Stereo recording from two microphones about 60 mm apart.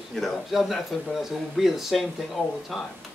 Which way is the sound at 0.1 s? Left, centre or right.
Centre.